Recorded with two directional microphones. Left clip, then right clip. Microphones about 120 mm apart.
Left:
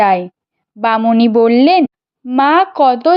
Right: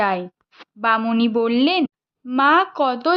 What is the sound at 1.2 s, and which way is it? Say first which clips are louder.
A woman's voice: left 9 dB; 50° left (ahead or behind).